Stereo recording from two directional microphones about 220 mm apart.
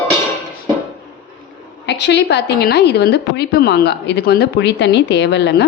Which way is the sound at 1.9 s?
50° left (ahead or behind).